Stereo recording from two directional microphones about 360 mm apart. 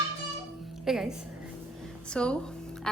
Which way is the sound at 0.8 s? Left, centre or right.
Centre.